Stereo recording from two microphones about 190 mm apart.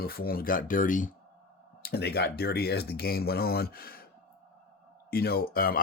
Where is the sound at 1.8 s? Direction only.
55° left (ahead or behind).